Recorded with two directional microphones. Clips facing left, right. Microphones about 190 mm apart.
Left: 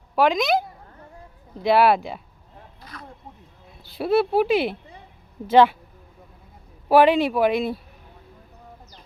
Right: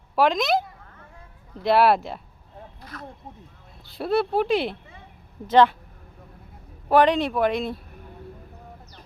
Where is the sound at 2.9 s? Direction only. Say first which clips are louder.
Right 3 dB; 45° right (ahead or behind).